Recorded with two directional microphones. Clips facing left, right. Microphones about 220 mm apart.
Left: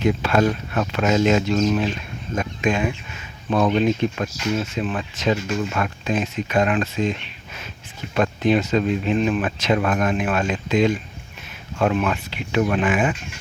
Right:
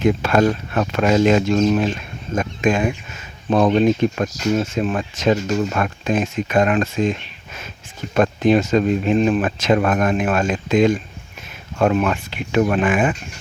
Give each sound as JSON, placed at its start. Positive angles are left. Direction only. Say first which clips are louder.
{"t": 0.0, "sound": "speech", "louder": "right 3 dB", "side_deg": -50}
{"t": 3.5, "sound": "speech", "louder": "right 4 dB", "side_deg": -40}
{"t": 8.1, "sound": "speech", "louder": "right 4 dB", "side_deg": -45}